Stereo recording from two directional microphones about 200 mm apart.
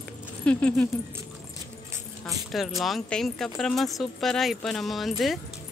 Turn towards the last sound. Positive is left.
turn(degrees=0)  # may be behind; listen again after turning